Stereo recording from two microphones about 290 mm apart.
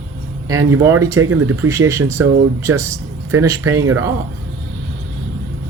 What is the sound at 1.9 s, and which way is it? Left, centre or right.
Speech, centre.